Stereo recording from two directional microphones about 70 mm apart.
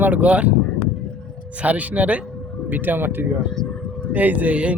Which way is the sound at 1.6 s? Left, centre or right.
Right.